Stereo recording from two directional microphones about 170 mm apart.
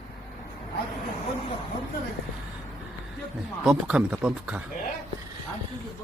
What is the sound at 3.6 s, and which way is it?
Speech, 5° right (ahead or behind).